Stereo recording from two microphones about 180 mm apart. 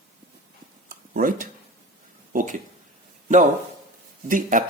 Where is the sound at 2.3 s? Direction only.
45° right (ahead or behind).